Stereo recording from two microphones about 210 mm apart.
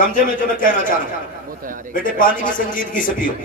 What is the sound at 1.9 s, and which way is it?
Speech, 40° left (ahead or behind).